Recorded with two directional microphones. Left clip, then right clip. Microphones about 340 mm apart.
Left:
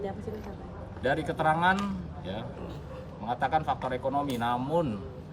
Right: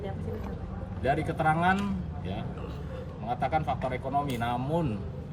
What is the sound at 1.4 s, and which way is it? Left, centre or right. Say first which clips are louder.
Speech: left 1 dB; centre.